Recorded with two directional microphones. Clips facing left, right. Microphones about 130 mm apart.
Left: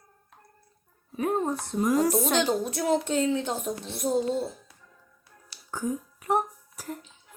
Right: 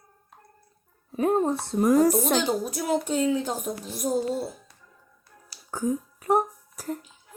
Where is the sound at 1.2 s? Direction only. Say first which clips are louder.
Right 4 dB; 35° right (ahead or behind).